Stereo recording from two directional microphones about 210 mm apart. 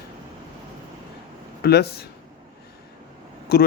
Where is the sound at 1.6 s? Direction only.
50° left (ahead or behind).